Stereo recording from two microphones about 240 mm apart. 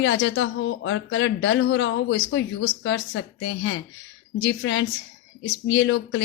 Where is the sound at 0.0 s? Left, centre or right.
Left.